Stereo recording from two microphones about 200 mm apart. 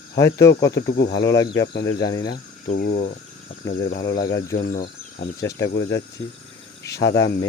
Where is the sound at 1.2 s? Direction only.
15° left (ahead or behind).